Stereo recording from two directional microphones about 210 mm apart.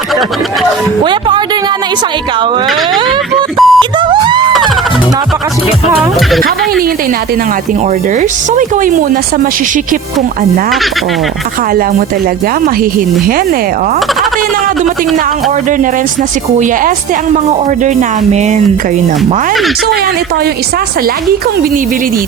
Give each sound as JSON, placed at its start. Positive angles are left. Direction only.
{"t": 3.6, "sound": "speech", "side_deg": 0}
{"t": 4.1, "sound": "a sound", "side_deg": -20}
{"t": 17.8, "sound": "speech", "side_deg": -35}